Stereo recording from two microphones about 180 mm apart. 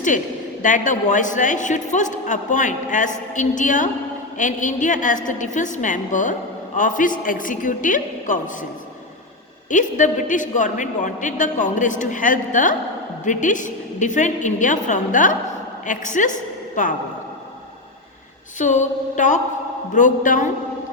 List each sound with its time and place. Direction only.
0.6 s a man's voice: 45° left (ahead or behind)
9.6 s a man's voice: 45° left (ahead or behind)
18.6 s a man's voice: 40° left (ahead or behind)